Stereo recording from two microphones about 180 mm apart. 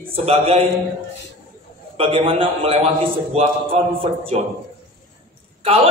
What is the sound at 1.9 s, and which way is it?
A man's voice, 30° right (ahead or behind).